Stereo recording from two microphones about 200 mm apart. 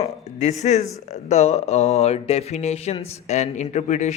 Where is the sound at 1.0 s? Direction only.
35° left (ahead or behind).